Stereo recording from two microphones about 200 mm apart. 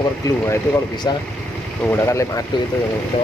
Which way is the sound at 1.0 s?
20° left (ahead or behind).